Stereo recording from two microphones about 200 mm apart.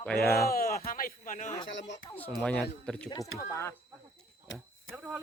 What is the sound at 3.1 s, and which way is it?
Speech, 15° left (ahead or behind).